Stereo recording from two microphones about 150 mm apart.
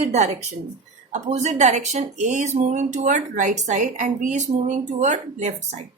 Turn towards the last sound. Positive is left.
turn(degrees=-50)  # may be behind; listen again after turning